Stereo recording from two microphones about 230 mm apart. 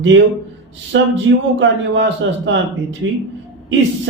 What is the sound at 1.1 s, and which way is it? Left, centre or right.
Speech, right.